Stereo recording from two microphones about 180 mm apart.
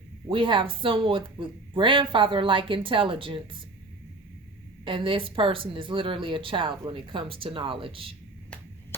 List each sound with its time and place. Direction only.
0.3 s speech: 30° right (ahead or behind)
4.9 s speech: 30° right (ahead or behind)